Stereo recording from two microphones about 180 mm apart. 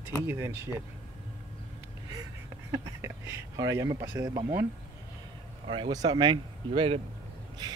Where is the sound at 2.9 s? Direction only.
15° right (ahead or behind).